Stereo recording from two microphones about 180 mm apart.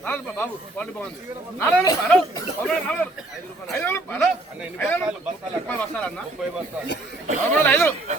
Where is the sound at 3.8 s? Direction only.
10° left (ahead or behind).